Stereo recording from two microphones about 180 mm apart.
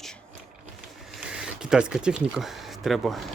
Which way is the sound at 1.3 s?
5° right (ahead or behind).